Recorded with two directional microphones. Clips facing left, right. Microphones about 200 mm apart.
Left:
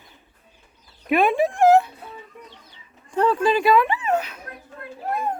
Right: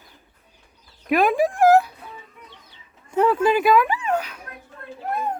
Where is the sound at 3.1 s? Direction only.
5° right (ahead or behind).